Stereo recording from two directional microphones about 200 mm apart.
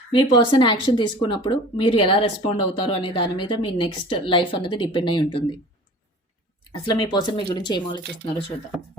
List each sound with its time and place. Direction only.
0.1 s speech: 25° left (ahead or behind)
6.8 s speech: 20° left (ahead or behind)